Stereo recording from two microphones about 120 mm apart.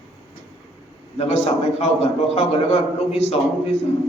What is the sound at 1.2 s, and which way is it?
A man's voice, 60° left (ahead or behind).